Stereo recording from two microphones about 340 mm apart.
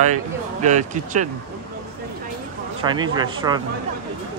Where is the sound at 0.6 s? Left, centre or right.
Right.